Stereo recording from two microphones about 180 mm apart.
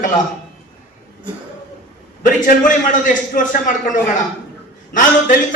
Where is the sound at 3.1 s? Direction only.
45° left (ahead or behind).